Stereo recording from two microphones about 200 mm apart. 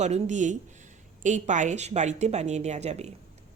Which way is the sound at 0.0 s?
35° right (ahead or behind).